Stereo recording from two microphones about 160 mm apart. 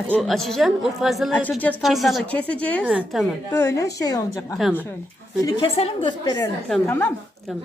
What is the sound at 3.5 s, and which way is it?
A woman's voice, 15° left (ahead or behind).